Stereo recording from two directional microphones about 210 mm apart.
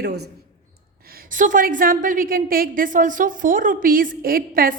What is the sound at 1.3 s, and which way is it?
A woman's voice, 40° right (ahead or behind).